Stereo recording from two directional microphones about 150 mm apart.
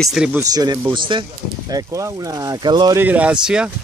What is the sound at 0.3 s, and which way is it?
Speech, 25° right (ahead or behind).